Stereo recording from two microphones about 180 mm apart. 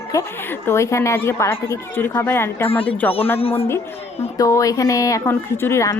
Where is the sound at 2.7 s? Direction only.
30° left (ahead or behind).